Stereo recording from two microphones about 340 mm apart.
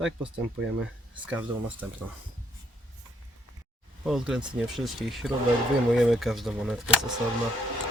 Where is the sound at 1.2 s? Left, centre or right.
Centre.